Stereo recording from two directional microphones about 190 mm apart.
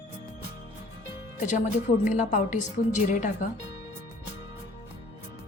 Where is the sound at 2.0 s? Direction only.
40° left (ahead or behind).